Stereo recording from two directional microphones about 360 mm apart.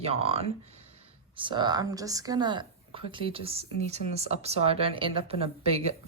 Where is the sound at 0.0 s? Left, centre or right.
Centre.